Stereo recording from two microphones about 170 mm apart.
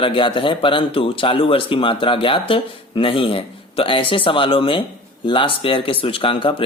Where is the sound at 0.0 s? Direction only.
30° left (ahead or behind).